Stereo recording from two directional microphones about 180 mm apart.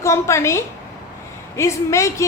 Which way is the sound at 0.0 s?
15° left (ahead or behind).